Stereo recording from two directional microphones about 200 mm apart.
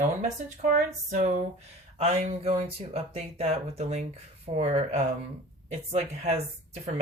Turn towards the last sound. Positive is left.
turn(degrees=-30)  # may be behind; listen again after turning